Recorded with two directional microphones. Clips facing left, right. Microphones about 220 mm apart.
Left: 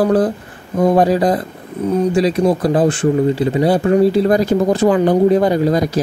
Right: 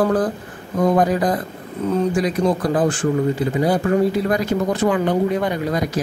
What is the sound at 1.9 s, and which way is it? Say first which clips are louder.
Speech: left 4 dB; 15° left (ahead or behind).